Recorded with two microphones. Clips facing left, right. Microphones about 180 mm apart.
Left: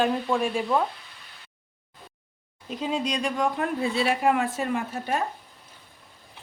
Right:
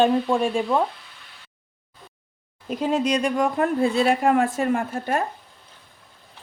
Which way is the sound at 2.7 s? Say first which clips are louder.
Right 6 dB; 55° right (ahead or behind).